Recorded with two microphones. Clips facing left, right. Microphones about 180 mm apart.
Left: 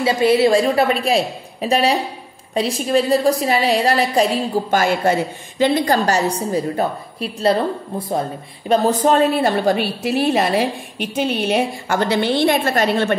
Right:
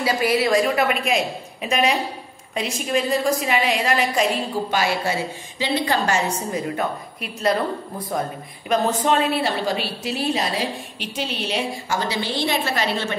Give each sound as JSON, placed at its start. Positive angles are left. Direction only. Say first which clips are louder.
{"t": 0.0, "sound": "a woman's voice", "louder": "left 6 dB", "side_deg": 25}